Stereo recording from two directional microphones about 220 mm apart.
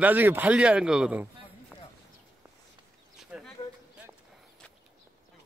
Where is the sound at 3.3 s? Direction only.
5° right (ahead or behind).